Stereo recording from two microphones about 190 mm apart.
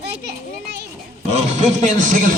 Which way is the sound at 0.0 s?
60° right (ahead or behind).